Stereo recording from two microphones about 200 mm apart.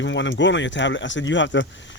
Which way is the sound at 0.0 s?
65° left (ahead or behind).